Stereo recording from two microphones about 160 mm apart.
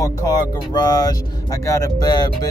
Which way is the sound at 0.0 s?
20° left (ahead or behind).